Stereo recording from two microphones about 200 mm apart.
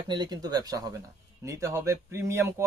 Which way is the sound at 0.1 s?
20° right (ahead or behind).